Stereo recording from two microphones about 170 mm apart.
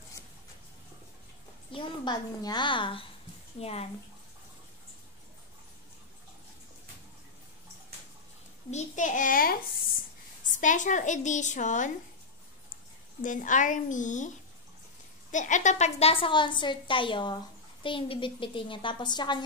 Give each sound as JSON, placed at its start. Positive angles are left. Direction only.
{"t": 1.7, "sound": "a woman's voice", "side_deg": 25}
{"t": 8.6, "sound": "a child's voice", "side_deg": 45}
{"t": 13.2, "sound": "a woman's voice", "side_deg": 50}
{"t": 15.3, "sound": "a woman's voice", "side_deg": 45}